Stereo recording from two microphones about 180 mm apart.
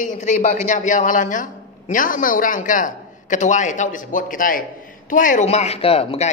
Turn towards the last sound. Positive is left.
turn(degrees=30)  # may be behind; listen again after turning